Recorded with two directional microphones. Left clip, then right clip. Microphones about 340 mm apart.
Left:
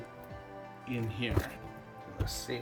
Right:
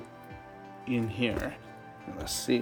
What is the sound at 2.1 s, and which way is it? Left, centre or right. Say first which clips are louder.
Speech: right 8 dB; right.